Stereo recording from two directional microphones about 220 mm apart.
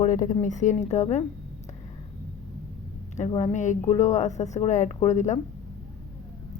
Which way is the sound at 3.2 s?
25° left (ahead or behind).